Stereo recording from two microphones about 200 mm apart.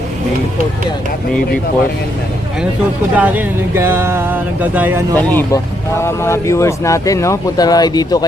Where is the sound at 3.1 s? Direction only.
10° right (ahead or behind).